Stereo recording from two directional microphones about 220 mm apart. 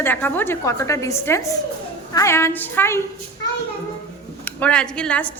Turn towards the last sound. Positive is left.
turn(degrees=5)  # may be behind; listen again after turning